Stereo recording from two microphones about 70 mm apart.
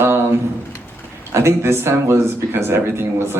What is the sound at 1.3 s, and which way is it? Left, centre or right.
Speech, right.